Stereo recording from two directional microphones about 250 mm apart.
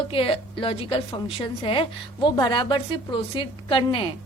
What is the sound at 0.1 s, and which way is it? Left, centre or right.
A woman's voice, left.